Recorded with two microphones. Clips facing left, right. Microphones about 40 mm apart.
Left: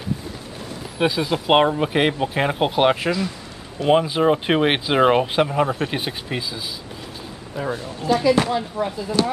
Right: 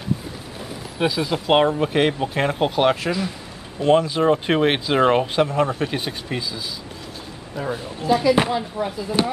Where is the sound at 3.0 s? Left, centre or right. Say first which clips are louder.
Left 1 dB; centre.